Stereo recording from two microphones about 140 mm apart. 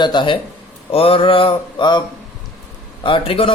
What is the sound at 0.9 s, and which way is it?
Speech, 45° left (ahead or behind).